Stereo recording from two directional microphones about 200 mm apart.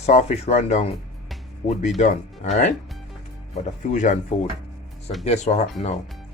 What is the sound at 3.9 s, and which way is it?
Speech, 40° left (ahead or behind).